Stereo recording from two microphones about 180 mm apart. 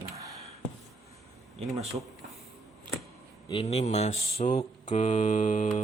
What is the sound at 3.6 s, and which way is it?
Mantra, 40° left (ahead or behind).